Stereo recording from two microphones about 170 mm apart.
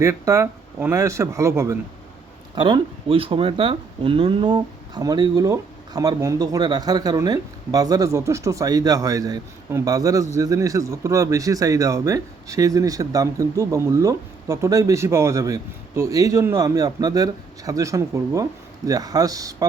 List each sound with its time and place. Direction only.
0.0 s speech: 20° right (ahead or behind)